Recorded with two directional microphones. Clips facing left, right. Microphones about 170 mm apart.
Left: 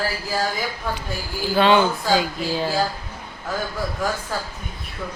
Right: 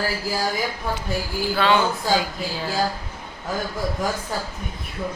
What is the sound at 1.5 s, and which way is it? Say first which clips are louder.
Speech: left 4 dB; 20° left (ahead or behind).